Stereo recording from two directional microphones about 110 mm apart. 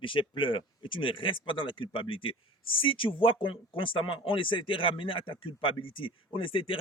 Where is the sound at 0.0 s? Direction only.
50° left (ahead or behind).